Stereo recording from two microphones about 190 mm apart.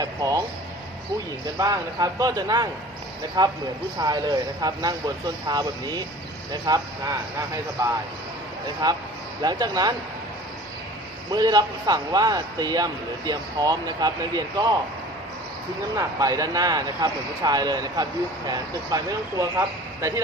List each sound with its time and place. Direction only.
0.0 s speech: 20° right (ahead or behind)
1.5 s a man's voice: 20° right (ahead or behind)
8.8 s a man's voice: 20° right (ahead or behind)
11.3 s a man's voice: 20° right (ahead or behind)
16.0 s a man's voice: 20° right (ahead or behind)